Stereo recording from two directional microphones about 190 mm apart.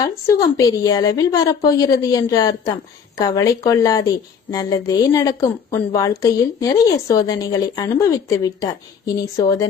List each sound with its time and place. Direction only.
0.0 s a woman's voice: 15° left (ahead or behind)